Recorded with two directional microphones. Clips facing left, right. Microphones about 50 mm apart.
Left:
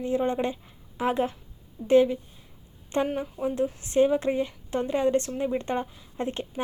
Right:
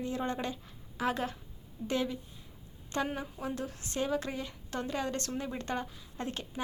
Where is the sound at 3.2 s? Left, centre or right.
Centre.